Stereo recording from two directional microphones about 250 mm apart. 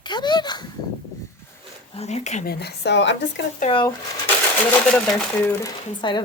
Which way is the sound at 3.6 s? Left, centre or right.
Centre.